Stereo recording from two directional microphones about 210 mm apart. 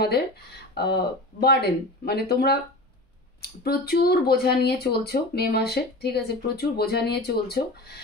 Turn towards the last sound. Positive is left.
turn(degrees=50)  # may be behind; listen again after turning